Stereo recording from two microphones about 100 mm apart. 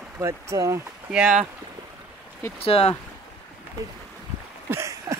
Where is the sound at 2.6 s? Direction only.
75° left (ahead or behind).